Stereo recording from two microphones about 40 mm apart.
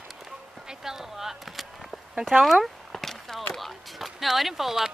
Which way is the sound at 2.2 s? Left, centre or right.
Centre.